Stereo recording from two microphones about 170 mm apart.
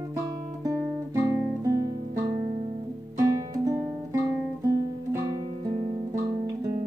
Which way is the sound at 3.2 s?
20° right (ahead or behind).